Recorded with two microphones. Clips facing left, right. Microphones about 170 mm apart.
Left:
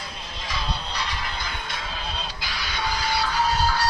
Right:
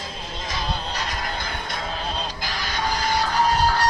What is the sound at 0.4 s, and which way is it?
Music, 45° right (ahead or behind).